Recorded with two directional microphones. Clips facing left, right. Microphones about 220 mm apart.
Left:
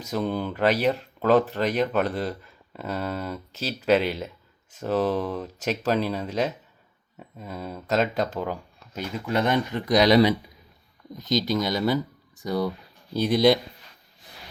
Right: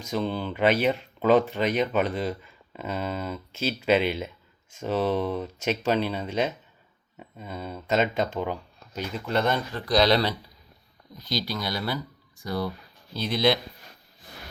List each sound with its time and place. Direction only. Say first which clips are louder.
0.1 s speech: left 1 dB; 5° left (ahead or behind)
3.5 s speech: right 6 dB; 35° left (ahead or behind)
3.8 s speech: left 2 dB; centre (ahead or behind)